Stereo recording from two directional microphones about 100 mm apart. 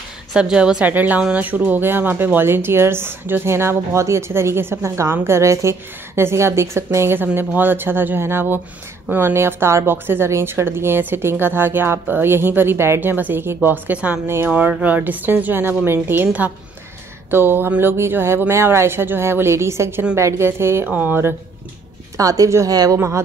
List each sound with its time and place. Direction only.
0.3 s a woman's voice: 10° right (ahead or behind)
22.1 s a woman's voice: 35° right (ahead or behind)